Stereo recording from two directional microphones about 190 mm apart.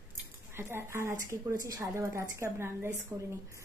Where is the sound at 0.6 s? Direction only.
15° right (ahead or behind).